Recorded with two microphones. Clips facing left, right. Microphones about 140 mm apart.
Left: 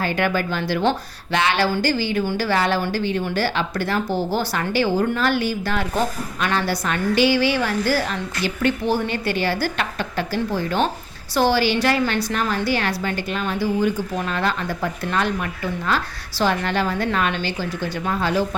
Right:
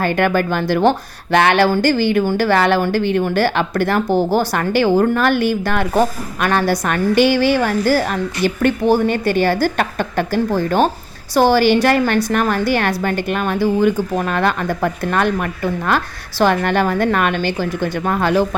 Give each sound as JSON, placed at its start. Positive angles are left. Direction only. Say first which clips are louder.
{"t": 0.0, "sound": "a woman's voice", "louder": "right 5 dB", "side_deg": -55}